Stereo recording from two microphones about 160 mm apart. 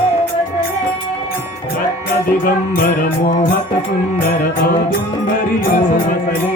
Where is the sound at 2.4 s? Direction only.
65° left (ahead or behind).